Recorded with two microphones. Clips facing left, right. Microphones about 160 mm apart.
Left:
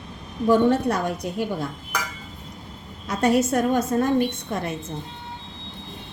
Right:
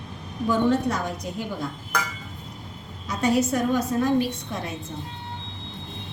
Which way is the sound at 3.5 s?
50° left (ahead or behind).